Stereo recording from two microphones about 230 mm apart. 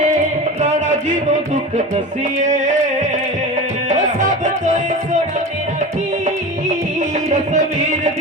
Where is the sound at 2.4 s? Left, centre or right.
Right.